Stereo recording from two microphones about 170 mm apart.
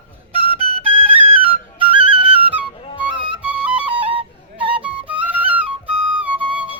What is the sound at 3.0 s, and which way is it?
Music, 10° right (ahead or behind).